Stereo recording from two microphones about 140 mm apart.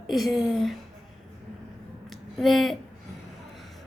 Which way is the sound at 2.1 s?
Centre (ahead or behind).